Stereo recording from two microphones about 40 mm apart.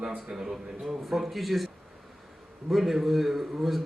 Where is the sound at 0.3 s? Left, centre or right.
Centre.